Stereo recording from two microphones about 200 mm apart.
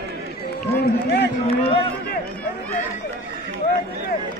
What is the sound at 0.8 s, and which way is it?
Run, 55° left (ahead or behind).